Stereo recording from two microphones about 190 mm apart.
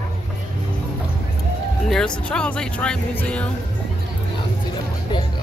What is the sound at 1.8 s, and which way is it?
Speech, 5° left (ahead or behind).